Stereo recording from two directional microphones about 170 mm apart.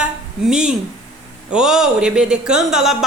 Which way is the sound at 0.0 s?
5° right (ahead or behind).